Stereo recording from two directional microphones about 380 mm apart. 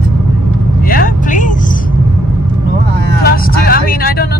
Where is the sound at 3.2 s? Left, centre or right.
Left.